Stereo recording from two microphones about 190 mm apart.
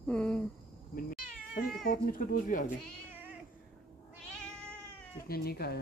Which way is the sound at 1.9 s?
45° left (ahead or behind).